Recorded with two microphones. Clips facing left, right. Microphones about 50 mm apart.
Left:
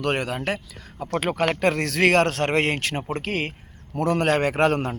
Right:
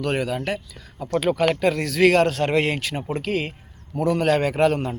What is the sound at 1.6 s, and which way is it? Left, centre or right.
Speech, left.